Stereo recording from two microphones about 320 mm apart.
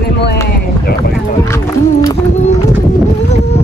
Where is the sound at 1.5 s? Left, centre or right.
Centre.